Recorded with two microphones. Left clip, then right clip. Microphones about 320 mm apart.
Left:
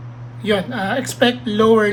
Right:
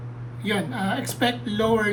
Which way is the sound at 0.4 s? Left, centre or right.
Left.